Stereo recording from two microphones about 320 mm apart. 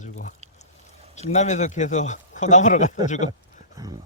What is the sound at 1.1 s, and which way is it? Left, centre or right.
A man's voice, left.